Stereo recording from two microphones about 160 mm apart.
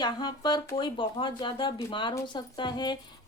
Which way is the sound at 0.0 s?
25° left (ahead or behind).